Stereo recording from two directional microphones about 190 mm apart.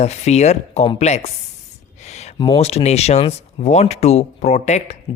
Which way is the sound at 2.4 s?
30° left (ahead or behind).